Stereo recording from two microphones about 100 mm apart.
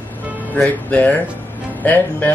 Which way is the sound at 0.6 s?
15° left (ahead or behind).